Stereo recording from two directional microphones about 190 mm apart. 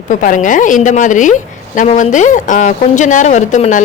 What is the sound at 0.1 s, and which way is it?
A woman's voice, 45° left (ahead or behind).